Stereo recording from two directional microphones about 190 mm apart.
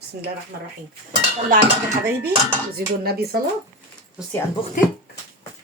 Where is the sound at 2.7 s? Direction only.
55° right (ahead or behind).